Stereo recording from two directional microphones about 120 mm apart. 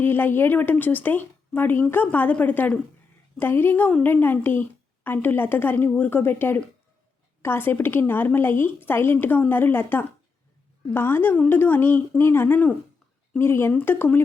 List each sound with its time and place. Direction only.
0.0 s a woman's voice: 15° left (ahead or behind)